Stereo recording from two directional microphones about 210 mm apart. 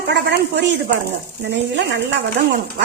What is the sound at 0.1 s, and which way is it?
Speech, 55° right (ahead or behind).